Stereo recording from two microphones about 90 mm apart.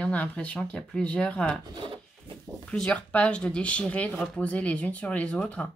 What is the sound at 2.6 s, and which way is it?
Speech, 10° left (ahead or behind).